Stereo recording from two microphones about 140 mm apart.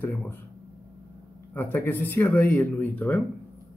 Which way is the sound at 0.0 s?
15° left (ahead or behind).